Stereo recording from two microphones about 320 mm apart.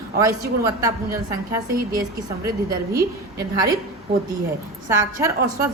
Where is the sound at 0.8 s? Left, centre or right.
Centre.